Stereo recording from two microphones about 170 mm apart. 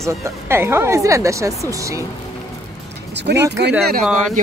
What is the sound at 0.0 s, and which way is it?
Speech, 15° right (ahead or behind).